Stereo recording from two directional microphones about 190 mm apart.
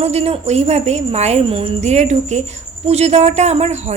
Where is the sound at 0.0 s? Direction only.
35° right (ahead or behind).